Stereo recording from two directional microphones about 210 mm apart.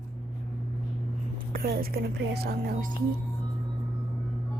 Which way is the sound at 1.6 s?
45° right (ahead or behind).